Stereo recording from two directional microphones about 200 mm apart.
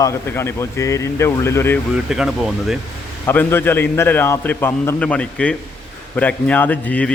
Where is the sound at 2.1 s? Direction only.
Centre (ahead or behind).